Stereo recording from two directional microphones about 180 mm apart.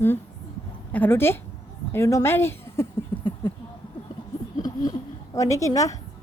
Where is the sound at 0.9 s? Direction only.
10° left (ahead or behind).